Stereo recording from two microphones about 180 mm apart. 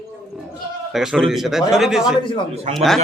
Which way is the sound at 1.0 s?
Centre (ahead or behind).